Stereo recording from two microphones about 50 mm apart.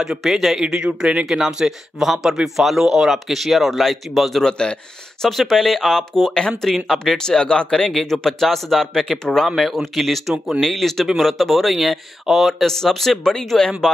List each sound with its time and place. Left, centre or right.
0.2 s speech: centre
0.6 s speech: centre
1.2 s speech: centre
4.5 s speech: centre
5.2 s speech: centre